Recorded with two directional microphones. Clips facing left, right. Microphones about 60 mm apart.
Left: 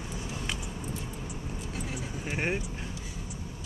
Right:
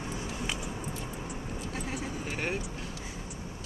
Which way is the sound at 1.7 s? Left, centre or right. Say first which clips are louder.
Right 1 dB; right.